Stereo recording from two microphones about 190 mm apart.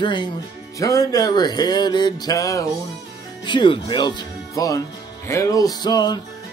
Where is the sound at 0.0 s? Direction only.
25° left (ahead or behind).